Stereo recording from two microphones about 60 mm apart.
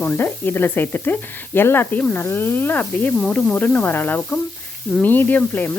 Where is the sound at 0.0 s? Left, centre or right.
Left.